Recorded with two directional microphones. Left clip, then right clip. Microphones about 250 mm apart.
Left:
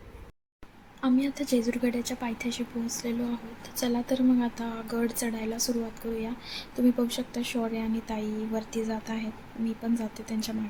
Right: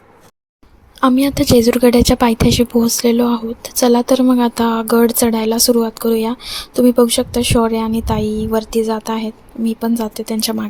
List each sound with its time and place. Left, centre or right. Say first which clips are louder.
1.0 s a woman's voice: right 15 dB; right